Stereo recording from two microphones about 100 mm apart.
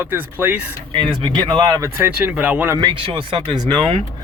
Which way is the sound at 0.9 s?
50° right (ahead or behind).